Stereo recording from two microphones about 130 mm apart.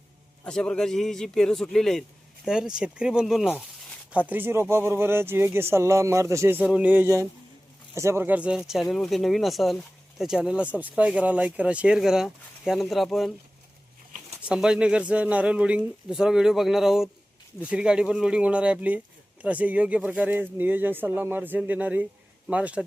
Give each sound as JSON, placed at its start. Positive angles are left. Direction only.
{"t": 0.4, "sound": "speech", "side_deg": 5}
{"t": 4.3, "sound": "speech", "side_deg": -15}
{"t": 6.7, "sound": "speech", "side_deg": -10}
{"t": 14.4, "sound": "speech", "side_deg": -5}